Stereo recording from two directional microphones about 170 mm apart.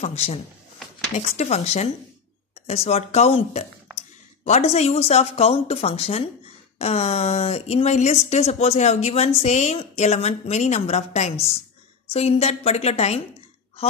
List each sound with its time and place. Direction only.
0.0 s a woman's voice: 40° left (ahead or behind)